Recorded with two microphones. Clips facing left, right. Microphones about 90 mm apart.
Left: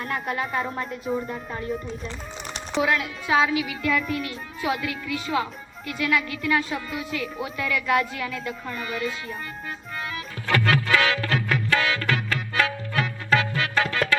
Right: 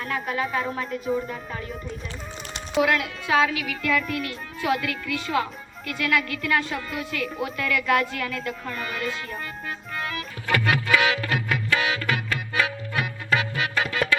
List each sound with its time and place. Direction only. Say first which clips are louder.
0.0 s speech: right 1 dB; centre (ahead or behind)
2.8 s speech: even; 5° left (ahead or behind)
3.9 s speech: even; 5° left (ahead or behind)
6.7 s speech: even; 5° left (ahead or behind)
10.5 s music: left 1 dB; 20° right (ahead or behind)